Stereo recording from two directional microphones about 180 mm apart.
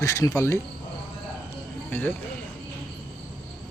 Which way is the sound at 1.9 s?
10° left (ahead or behind).